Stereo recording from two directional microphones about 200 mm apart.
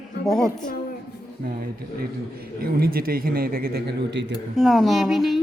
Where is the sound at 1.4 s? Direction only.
50° right (ahead or behind).